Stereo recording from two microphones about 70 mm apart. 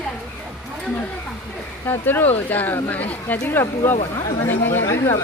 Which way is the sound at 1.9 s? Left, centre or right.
Left.